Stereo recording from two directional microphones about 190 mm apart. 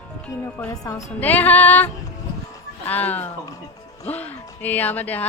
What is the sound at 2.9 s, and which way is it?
Speech, 10° left (ahead or behind).